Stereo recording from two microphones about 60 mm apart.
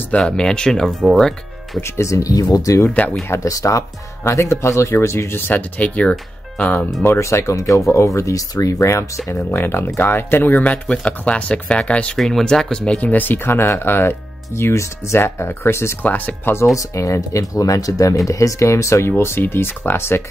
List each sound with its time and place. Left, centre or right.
0.2 s speech: centre
1.8 s speech: left
2.9 s speech: left
3.3 s speech: left
4.2 s speech: left
5.5 s speech: left
7.2 s speech: left
7.9 s speech: left
9.4 s speech: left; by 12.2 s centre
12.2 s speech: centre; by 16.0 s left
16.0 s speech: left
16.7 s speech: left